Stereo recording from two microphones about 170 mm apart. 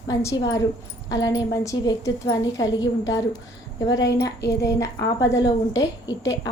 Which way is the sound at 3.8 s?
20° left (ahead or behind).